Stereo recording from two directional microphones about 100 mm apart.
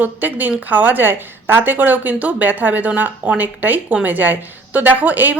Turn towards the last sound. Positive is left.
turn(degrees=-15)  # may be behind; listen again after turning